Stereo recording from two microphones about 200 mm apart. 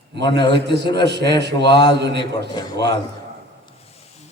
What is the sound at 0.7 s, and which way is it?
A man's voice, 60° right (ahead or behind).